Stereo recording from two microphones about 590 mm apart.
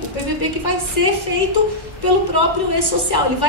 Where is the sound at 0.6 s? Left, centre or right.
Left.